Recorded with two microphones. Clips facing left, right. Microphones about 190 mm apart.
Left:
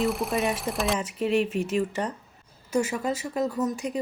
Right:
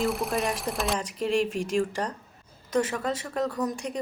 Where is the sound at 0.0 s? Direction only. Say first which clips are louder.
Left 1 dB; centre (ahead or behind).